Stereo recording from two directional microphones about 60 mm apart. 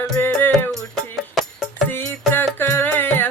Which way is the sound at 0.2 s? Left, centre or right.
Left.